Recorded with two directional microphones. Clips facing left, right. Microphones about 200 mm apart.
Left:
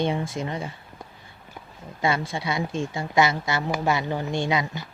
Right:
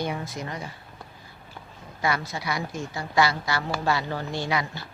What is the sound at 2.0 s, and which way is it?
A woman's voice, 25° left (ahead or behind).